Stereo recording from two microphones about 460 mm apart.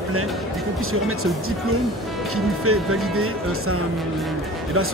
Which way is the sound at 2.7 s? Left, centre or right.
Right.